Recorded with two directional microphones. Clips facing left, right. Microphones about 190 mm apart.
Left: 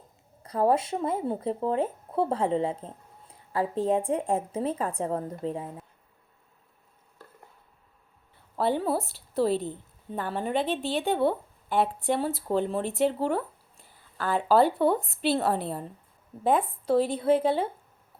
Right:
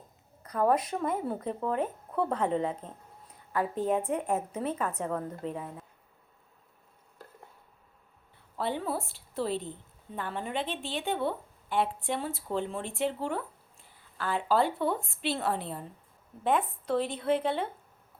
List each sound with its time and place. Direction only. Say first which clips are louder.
0.4 s speech: left 2 dB; 30° left (ahead or behind)
8.5 s speech: left 6 dB; 40° left (ahead or behind)